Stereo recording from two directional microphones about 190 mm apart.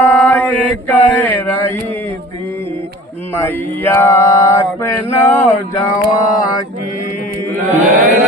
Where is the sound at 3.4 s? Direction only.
10° left (ahead or behind).